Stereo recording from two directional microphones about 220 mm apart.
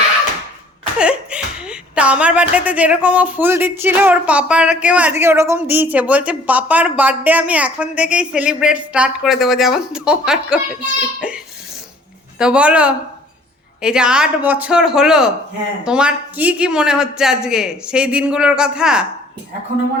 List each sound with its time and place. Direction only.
0.9 s speech: 5° right (ahead or behind)
12.4 s speech: 5° right (ahead or behind)